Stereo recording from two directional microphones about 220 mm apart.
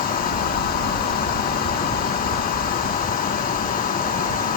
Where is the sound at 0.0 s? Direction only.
40° left (ahead or behind).